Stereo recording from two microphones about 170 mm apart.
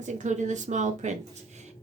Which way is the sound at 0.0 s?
45° right (ahead or behind).